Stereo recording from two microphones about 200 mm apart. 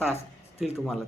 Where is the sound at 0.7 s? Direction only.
Centre (ahead or behind).